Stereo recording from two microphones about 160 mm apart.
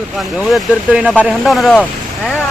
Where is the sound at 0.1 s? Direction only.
Centre (ahead or behind).